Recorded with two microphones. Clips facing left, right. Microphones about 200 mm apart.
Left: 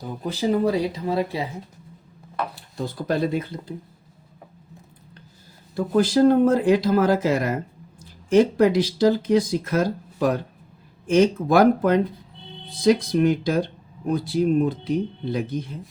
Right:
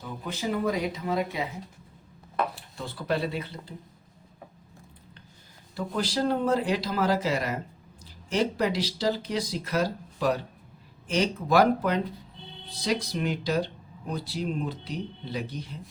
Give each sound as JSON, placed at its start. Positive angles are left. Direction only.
{"t": 0.0, "sound": "speech", "side_deg": 35}
{"t": 2.7, "sound": "speech", "side_deg": 40}
{"t": 5.7, "sound": "speech", "side_deg": 50}